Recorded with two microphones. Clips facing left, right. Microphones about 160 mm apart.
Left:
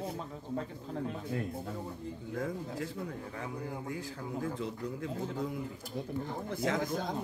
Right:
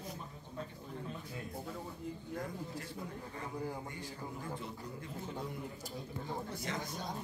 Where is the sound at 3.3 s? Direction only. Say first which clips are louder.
Left 2 dB; 90° left.